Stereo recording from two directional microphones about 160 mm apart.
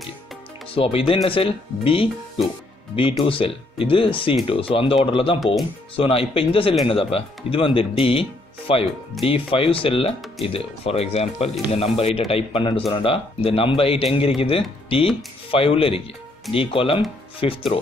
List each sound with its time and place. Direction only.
0.7 s speech: 35° left (ahead or behind)